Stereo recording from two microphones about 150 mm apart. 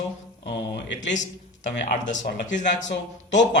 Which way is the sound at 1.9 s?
55° left (ahead or behind).